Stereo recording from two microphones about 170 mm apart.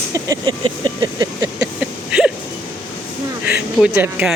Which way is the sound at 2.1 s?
5° right (ahead or behind).